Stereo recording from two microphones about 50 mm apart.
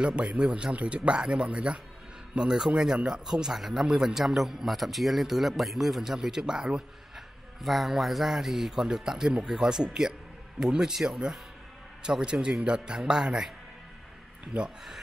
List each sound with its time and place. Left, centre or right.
0.0 s a man's voice: right
7.6 s a man's voice: centre